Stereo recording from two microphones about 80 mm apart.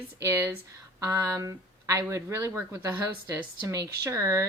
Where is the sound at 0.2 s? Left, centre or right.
Right.